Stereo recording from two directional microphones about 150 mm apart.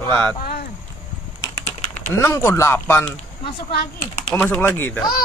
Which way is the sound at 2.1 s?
20° left (ahead or behind).